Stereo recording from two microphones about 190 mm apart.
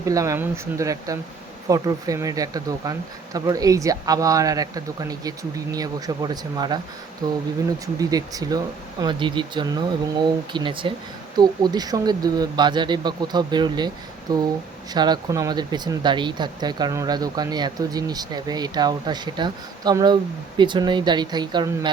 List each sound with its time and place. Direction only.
0.0 s speech: 15° right (ahead or behind)
14.9 s speech: 20° right (ahead or behind)